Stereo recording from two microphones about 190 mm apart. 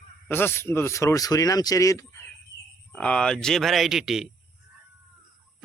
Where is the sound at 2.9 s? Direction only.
5° left (ahead or behind).